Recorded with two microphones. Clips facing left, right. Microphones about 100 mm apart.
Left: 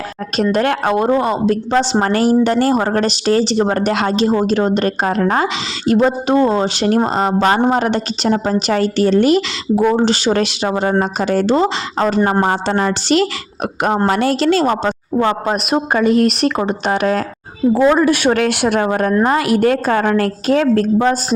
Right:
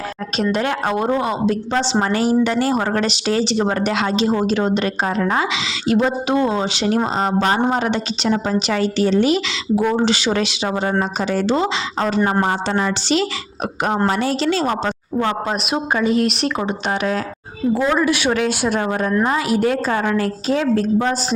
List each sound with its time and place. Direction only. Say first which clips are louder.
0.3 s speech: left 4 dB; 50° left (ahead or behind)
9.9 s a woman's voice: left 3 dB; 35° left (ahead or behind); by 14.9 s 55° left (ahead or behind)
15.2 s a woman's voice: left 4 dB; 45° left (ahead or behind)